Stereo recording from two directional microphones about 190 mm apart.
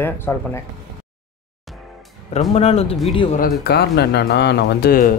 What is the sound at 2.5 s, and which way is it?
Speech, 30° left (ahead or behind).